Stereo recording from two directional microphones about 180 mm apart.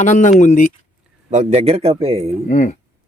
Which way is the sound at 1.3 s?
40° right (ahead or behind).